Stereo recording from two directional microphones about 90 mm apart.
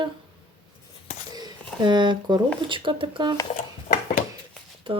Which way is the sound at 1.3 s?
50° right (ahead or behind).